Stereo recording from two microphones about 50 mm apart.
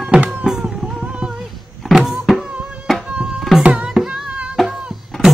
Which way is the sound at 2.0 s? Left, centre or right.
Centre.